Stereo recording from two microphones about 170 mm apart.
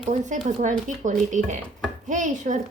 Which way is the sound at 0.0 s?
45° right (ahead or behind).